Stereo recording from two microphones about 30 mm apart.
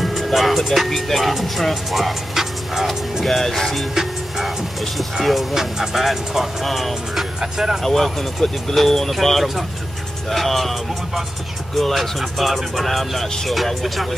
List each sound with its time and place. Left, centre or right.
0.0 s music: centre
0.8 s speech: centre
2.3 s music: centre
3.3 s speech: centre
3.9 s music: centre
5.2 s speech: centre
5.5 s speech: centre
7.5 s speech: centre
7.8 s speech: centre